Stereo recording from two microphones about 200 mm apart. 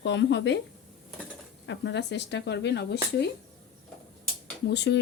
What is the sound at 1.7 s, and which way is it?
A woman's voice, 60° left (ahead or behind).